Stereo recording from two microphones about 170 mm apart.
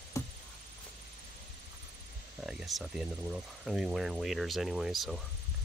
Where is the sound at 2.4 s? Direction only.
5° right (ahead or behind).